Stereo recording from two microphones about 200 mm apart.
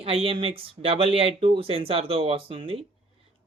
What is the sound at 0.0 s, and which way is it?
Speech, 30° right (ahead or behind).